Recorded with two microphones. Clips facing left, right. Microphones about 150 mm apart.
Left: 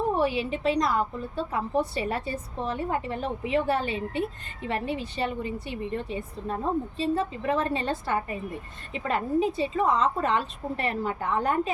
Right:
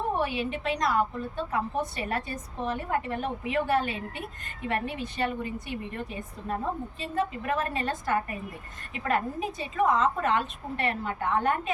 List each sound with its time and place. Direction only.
0.2 s a woman's voice: 30° left (ahead or behind)